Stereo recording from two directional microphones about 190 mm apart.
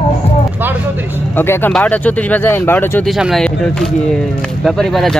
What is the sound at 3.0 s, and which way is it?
Speech, centre (ahead or behind).